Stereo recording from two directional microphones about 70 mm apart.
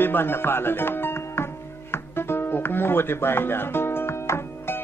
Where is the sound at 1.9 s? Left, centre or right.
Left.